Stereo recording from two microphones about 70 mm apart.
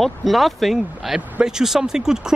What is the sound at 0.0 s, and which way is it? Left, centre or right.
Speech, centre.